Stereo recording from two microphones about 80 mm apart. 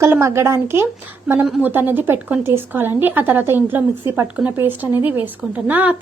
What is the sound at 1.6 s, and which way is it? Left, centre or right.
A woman's voice, right.